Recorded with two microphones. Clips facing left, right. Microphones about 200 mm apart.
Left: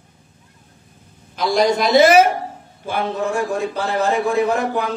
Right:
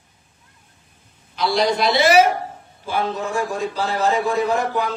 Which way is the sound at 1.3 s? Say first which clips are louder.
Left 2 dB; 45° left (ahead or behind).